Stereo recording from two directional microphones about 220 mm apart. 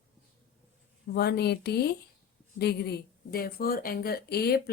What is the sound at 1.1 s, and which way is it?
Speech, 45° left (ahead or behind).